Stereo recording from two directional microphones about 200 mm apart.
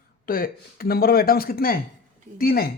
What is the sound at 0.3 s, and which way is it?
Speech, 45° left (ahead or behind).